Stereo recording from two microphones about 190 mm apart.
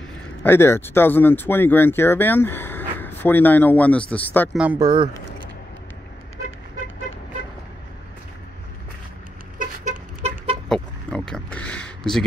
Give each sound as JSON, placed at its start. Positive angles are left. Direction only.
{"t": 0.4, "sound": "speech", "side_deg": 10}
{"t": 4.6, "sound": "speech", "side_deg": -10}
{"t": 4.8, "sound": "speech", "side_deg": -25}
{"t": 9.6, "sound": "chicken", "side_deg": -35}
{"t": 10.7, "sound": "a sound", "side_deg": 5}